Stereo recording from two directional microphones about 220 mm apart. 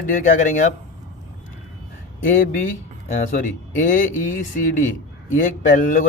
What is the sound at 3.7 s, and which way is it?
A man's voice, 35° left (ahead or behind).